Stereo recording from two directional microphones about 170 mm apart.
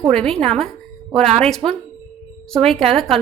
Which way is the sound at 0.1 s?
5° left (ahead or behind).